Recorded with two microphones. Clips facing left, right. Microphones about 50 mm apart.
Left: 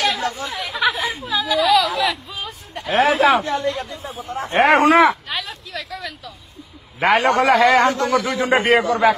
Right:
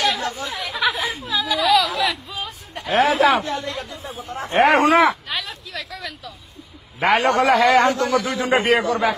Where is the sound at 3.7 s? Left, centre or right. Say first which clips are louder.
Left 2 dB; centre.